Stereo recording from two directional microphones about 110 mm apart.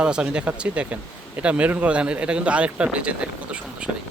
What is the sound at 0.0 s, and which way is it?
Speech, 10° right (ahead or behind).